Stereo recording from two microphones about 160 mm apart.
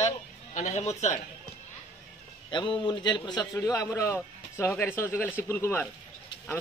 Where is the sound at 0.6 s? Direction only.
45° left (ahead or behind).